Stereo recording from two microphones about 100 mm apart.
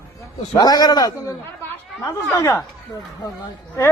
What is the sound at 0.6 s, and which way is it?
A man's voice, 40° left (ahead or behind).